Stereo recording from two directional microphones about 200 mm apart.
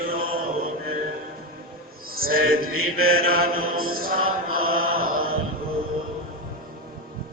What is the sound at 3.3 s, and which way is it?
Speech, 45° right (ahead or behind).